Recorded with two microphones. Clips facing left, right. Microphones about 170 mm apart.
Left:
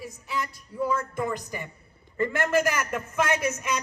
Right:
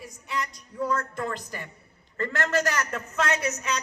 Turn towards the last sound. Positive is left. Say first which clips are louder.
# left 1 dB
turn(degrees=10)  # may be behind; listen again after turning